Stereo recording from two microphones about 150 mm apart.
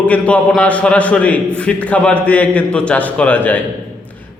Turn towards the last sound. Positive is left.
turn(degrees=10)  # may be behind; listen again after turning